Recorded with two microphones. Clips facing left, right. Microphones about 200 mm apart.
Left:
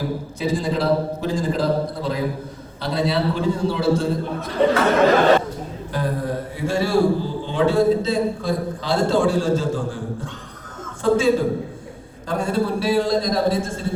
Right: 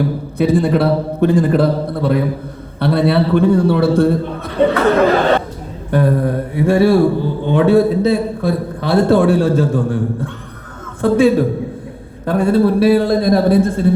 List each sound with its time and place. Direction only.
0.3 s speech: 60° right (ahead or behind)
5.9 s speech: 60° right (ahead or behind)